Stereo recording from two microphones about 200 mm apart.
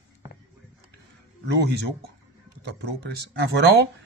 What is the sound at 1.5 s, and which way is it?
Speech, 55° right (ahead or behind).